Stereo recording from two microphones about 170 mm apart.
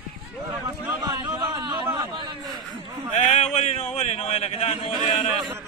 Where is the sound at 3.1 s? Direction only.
40° left (ahead or behind).